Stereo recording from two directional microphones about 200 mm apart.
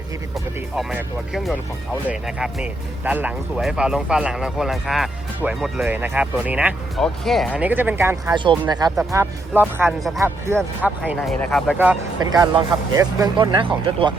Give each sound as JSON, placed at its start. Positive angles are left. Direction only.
{"t": 0.3, "sound": "speech", "side_deg": 0}
{"t": 9.5, "sound": "speech", "side_deg": -10}
{"t": 11.2, "sound": "speech", "side_deg": 5}
{"t": 12.2, "sound": "speech", "side_deg": -20}